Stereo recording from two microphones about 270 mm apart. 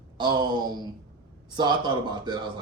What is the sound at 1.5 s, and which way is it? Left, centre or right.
Speech, centre.